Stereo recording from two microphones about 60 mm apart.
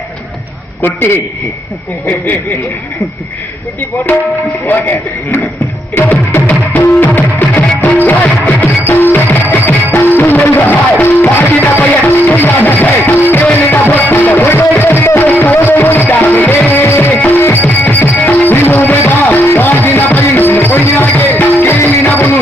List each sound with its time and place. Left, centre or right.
0.8 s a man's voice: left
4.7 s a man's voice: left
5.9 s music: left